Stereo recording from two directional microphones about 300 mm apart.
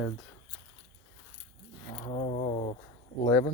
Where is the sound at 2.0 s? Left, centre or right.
Left.